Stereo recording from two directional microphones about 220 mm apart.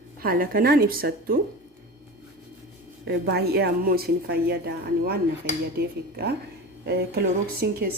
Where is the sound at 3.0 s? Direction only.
50° right (ahead or behind).